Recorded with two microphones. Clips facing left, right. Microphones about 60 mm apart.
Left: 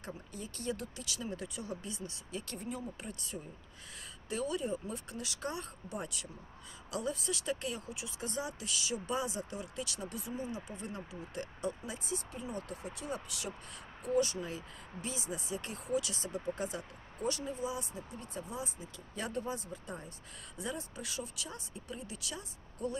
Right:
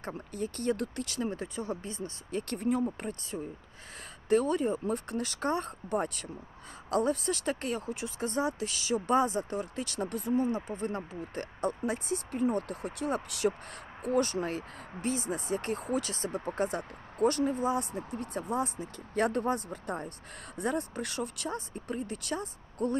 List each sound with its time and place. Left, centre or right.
0.0 s speech: right
4.3 s speech: right